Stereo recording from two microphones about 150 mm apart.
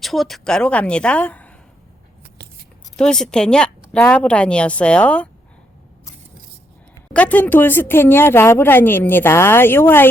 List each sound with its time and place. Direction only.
0.0 s speech: centre (ahead or behind)
2.2 s a sound: 90° right
2.9 s speech: 5° left (ahead or behind)
7.1 s speech: 10° left (ahead or behind)